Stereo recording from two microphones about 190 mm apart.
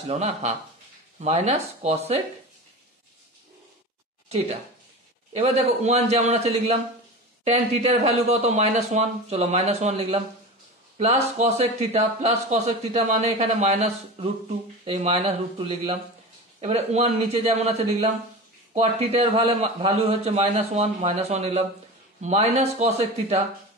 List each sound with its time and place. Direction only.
0.1 s speech: 35° right (ahead or behind)
4.3 s speech: 35° right (ahead or behind)
16.6 s speech: 35° right (ahead or behind)